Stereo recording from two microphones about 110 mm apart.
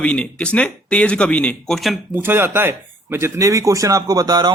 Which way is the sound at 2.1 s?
20° right (ahead or behind).